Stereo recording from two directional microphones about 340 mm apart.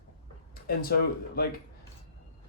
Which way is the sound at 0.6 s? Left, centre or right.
Left.